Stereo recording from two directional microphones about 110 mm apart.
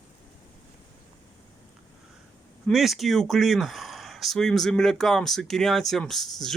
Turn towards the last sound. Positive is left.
turn(degrees=5)  # may be behind; listen again after turning